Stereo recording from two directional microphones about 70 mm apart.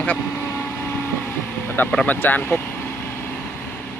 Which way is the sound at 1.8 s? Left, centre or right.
Left.